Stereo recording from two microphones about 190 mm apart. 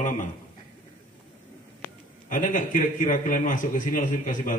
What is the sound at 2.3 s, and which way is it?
A man's voice, 45° left (ahead or behind).